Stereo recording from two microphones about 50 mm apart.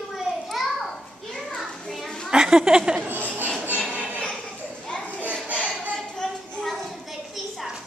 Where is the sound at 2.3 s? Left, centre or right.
Centre.